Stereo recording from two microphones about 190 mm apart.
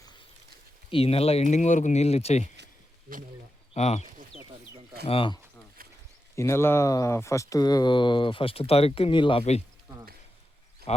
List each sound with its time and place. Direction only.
0.9 s speech: 30° left (ahead or behind)
3.8 s speech: 35° left (ahead or behind)
5.0 s speech: 30° left (ahead or behind)
6.3 s speech: 15° left (ahead or behind); by 9.6 s 30° left (ahead or behind)
10.9 s a sound: 35° left (ahead or behind)